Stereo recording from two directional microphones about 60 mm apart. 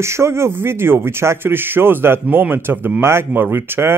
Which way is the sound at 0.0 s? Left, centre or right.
Right.